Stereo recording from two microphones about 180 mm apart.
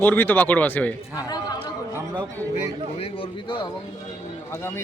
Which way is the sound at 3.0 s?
30° left (ahead or behind).